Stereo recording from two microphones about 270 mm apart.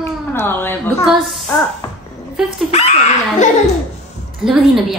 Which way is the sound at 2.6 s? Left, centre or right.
Left.